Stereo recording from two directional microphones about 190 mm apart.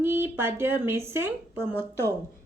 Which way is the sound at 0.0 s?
10° right (ahead or behind).